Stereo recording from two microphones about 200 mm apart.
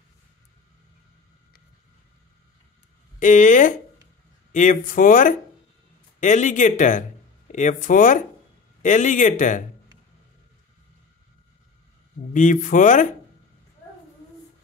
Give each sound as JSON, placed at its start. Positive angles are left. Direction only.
{"t": 3.2, "sound": "speech", "side_deg": 40}
{"t": 12.3, "sound": "speech", "side_deg": 40}